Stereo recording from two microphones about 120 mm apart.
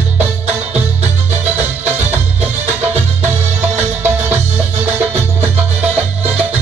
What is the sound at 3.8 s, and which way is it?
Music, 15° right (ahead or behind).